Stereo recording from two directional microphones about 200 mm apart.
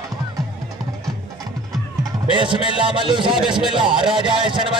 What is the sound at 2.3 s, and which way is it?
A man's voice, 25° right (ahead or behind).